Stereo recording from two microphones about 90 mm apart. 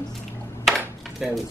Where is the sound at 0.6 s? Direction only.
Centre (ahead or behind).